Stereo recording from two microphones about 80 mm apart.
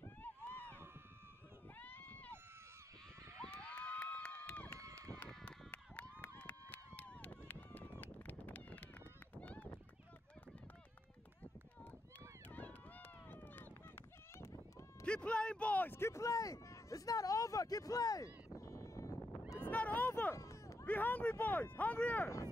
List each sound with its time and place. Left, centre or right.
0.2 s run: left
1.8 s a sound: left
3.4 s run: centre
4.7 s run: right
5.4 s run: centre
12.4 s run: left
14.4 s a sound: left
15.0 s speech: centre; by 19.1 s left
19.7 s a sound: centre
20.3 s run: left
20.8 s speech: left